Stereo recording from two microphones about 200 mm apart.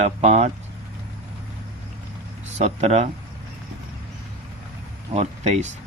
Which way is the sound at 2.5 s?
35° right (ahead or behind).